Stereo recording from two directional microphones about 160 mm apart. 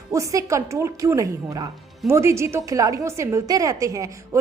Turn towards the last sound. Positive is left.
turn(degrees=-20)  # may be behind; listen again after turning